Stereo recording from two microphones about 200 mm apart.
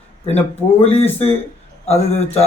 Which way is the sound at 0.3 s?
30° left (ahead or behind).